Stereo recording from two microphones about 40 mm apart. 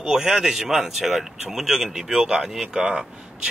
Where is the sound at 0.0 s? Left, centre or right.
Centre.